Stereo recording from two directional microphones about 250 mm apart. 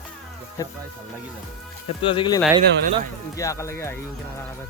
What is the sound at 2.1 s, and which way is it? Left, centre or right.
Speech, centre.